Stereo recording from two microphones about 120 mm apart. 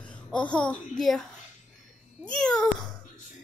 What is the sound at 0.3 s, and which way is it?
Speech, 10° left (ahead or behind).